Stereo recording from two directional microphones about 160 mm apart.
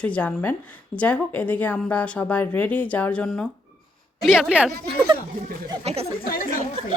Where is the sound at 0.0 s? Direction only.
10° left (ahead or behind).